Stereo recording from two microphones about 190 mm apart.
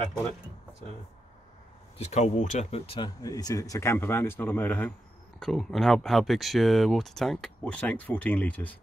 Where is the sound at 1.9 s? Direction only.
35° left (ahead or behind).